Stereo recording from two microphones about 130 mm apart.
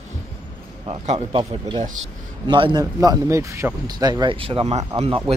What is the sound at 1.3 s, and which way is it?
Speech, 40° right (ahead or behind).